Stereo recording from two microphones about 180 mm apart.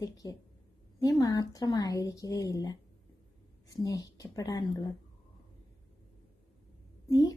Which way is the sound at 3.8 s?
20° left (ahead or behind).